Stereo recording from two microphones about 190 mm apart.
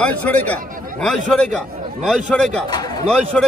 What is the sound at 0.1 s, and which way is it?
Speech, 5° left (ahead or behind).